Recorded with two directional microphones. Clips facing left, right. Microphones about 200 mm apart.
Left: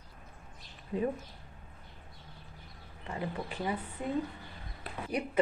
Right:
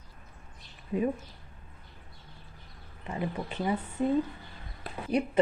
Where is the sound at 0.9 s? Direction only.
15° right (ahead or behind).